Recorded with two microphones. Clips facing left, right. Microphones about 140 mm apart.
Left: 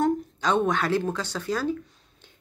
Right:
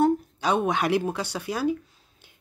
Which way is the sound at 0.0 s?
10° right (ahead or behind).